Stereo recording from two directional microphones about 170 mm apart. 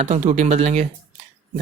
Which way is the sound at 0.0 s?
40° right (ahead or behind).